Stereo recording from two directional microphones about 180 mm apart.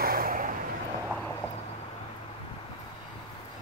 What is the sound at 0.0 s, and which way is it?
Vehicle, 55° right (ahead or behind).